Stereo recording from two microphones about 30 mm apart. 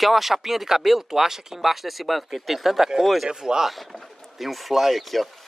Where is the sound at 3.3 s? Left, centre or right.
Right.